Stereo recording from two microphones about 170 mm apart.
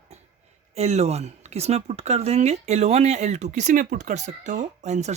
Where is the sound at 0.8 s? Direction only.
40° right (ahead or behind).